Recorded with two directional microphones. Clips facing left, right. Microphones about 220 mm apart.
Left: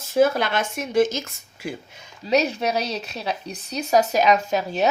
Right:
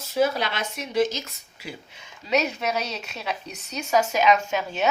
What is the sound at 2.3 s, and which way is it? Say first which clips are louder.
Speech: left 3 dB; 35° left (ahead or behind).